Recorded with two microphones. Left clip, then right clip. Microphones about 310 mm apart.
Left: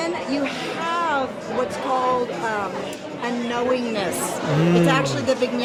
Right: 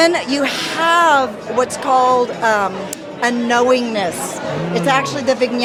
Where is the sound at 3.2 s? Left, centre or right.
Right.